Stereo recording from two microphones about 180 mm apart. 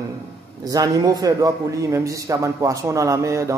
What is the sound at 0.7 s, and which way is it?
A man's voice, 20° right (ahead or behind).